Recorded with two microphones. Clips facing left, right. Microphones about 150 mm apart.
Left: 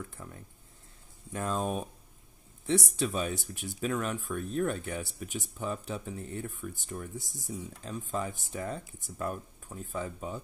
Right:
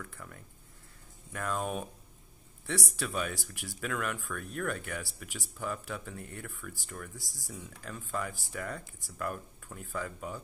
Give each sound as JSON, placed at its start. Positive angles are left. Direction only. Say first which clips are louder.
{"t": 0.0, "sound": "speech", "louder": "left 3 dB", "side_deg": 20}
{"t": 3.0, "sound": "speech", "louder": "left 4 dB", "side_deg": 25}